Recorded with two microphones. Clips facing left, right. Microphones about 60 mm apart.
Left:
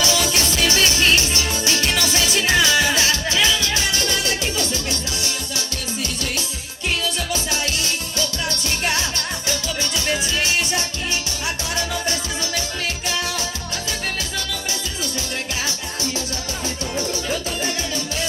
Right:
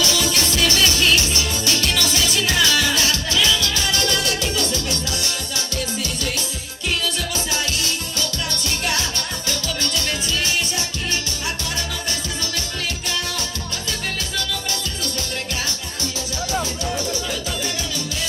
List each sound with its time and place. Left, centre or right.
0.0 s music: left
8.5 s music: left